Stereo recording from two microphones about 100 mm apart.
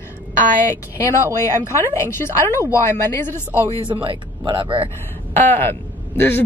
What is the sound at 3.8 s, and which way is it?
Speech, 55° right (ahead or behind).